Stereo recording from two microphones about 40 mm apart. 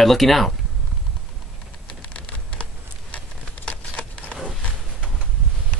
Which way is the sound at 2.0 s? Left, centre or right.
Left.